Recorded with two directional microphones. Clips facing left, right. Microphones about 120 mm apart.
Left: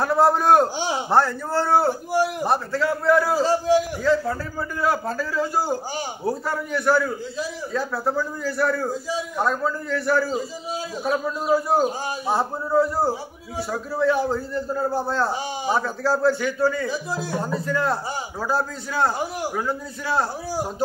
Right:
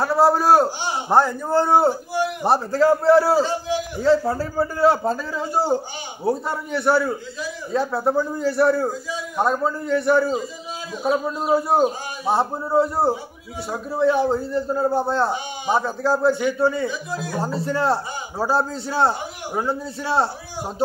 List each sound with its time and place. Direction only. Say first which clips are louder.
0.0 s a man's voice: right 1 dB; 5° right (ahead or behind)
1.1 s a man's voice: right 3 dB; 15° right (ahead or behind)
2.4 s a man's voice: right 5 dB; 35° right (ahead or behind)
3.4 s a man's voice: left 5 dB; 40° left (ahead or behind)
4.0 s a man's voice: right 3 dB; 30° right (ahead or behind)
17.1 s speech: left 1 dB; 30° left (ahead or behind)
17.4 s a man's voice: right 3 dB; 30° right (ahead or behind)